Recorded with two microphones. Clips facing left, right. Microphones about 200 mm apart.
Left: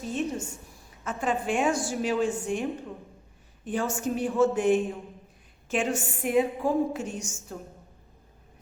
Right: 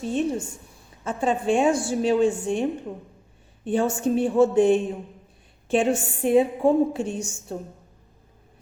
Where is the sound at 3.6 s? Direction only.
30° right (ahead or behind).